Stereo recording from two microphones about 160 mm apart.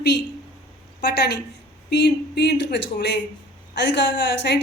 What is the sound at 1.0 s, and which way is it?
Speech, 90° left.